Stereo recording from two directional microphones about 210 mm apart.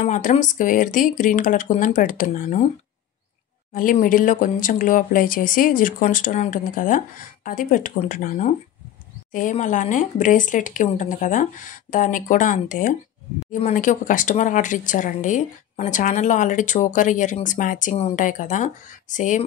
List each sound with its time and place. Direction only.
0.0 s speech: 35° left (ahead or behind)
3.7 s speech: 40° left (ahead or behind)